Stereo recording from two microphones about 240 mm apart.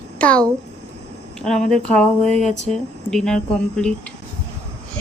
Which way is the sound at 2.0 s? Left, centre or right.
Centre.